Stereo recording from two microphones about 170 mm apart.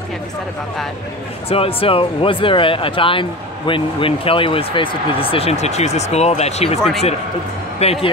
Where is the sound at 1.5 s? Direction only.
35° left (ahead or behind).